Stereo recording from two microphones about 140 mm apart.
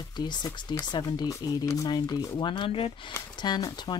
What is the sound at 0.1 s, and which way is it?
Speech, 30° left (ahead or behind).